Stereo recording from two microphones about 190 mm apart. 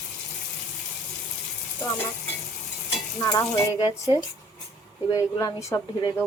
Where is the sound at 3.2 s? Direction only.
20° left (ahead or behind).